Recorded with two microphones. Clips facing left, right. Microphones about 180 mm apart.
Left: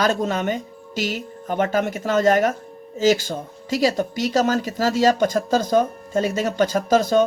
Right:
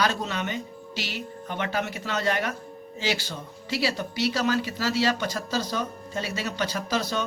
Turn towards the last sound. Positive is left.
turn(degrees=45)  # may be behind; listen again after turning